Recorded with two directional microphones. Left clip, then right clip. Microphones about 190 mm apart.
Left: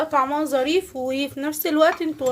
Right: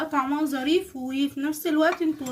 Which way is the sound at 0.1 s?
45° left (ahead or behind).